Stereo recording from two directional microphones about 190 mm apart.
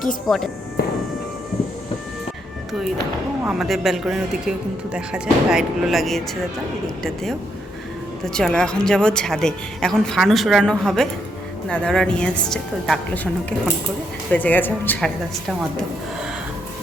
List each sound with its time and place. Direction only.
0.3 s a woman's voice: centre (ahead or behind)
3.4 s a woman's voice: centre (ahead or behind)
8.2 s a woman's voice: 5° left (ahead or behind)
14.3 s speech: 10° left (ahead or behind)